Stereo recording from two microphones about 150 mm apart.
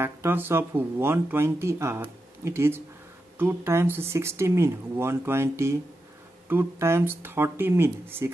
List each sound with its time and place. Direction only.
0.0 s speech: 15° right (ahead or behind)